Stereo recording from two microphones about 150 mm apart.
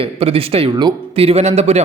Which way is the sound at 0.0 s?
40° right (ahead or behind).